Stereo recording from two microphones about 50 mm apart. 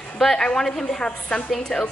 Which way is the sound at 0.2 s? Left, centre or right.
Centre.